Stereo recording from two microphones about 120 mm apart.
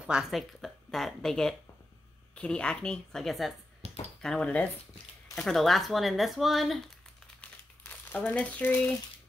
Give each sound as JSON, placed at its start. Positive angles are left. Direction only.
{"t": 0.0, "sound": "a woman's voice", "side_deg": -5}
{"t": 3.8, "sound": "a sound", "side_deg": -55}
{"t": 4.2, "sound": "a woman's voice", "side_deg": 5}
{"t": 7.8, "sound": "speech", "side_deg": 10}